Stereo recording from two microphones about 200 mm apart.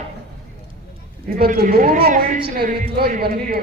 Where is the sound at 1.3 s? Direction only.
50° right (ahead or behind).